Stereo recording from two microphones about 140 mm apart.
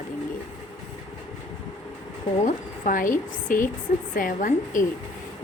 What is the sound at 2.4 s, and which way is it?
A woman's voice, 70° left (ahead or behind).